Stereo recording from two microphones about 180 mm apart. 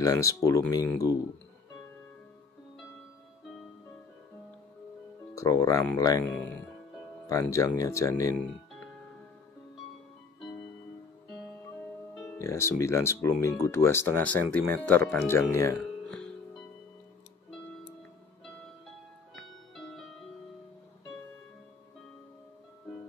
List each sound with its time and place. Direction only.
0.0 s speech: 20° left (ahead or behind)
5.3 s speech: 15° left (ahead or behind)
12.2 s speech: 15° left (ahead or behind)
15.8 s music: 5° left (ahead or behind)
19.3 s music: centre (ahead or behind)